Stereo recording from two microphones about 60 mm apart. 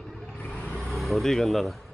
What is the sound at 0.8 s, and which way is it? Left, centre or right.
Speech, centre.